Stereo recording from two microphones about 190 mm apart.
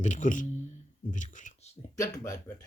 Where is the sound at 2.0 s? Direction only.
20° left (ahead or behind).